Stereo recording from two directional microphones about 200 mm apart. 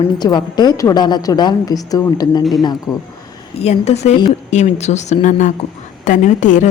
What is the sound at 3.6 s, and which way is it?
Speech, 30° left (ahead or behind).